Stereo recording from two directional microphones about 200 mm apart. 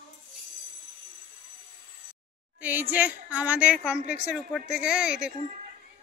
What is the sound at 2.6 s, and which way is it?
A woman's voice, 10° right (ahead or behind).